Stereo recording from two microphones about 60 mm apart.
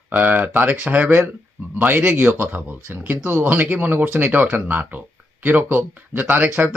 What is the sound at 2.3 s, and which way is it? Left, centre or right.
Speech, right.